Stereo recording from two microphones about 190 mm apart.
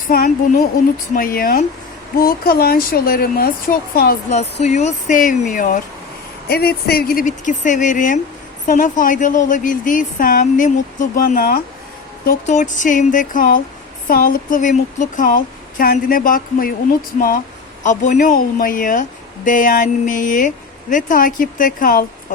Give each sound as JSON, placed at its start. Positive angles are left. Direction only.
{"t": 0.1, "sound": "a woman's voice", "side_deg": 50}
{"t": 4.6, "sound": "a woman's voice", "side_deg": 35}
{"t": 6.5, "sound": "a woman's voice", "side_deg": 55}